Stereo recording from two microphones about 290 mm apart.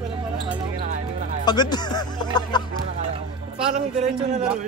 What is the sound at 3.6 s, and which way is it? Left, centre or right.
Speech, right.